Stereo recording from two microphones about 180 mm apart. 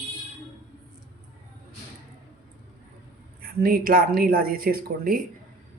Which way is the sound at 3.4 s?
55° right (ahead or behind).